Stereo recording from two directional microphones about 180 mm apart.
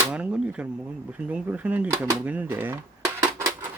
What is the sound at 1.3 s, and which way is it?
Speech, 10° right (ahead or behind).